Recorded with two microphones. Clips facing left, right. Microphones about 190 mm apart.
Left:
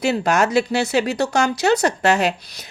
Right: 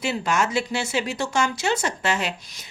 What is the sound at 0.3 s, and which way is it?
A woman's voice, 40° left (ahead or behind).